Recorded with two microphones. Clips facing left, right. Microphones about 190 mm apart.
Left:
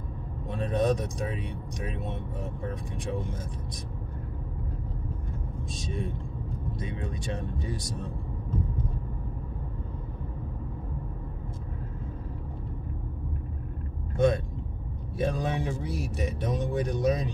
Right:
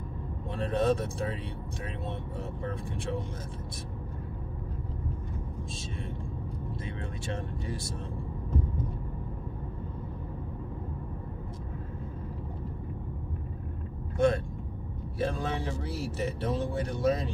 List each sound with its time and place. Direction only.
0.6 s speech: 15° left (ahead or behind)
5.7 s speech: 15° left (ahead or behind)
14.1 s speech: 20° left (ahead or behind)